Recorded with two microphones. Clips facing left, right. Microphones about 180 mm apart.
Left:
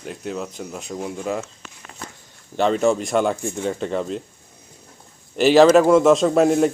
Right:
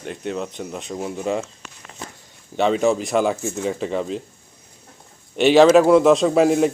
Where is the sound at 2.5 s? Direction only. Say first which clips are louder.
Even; centre (ahead or behind).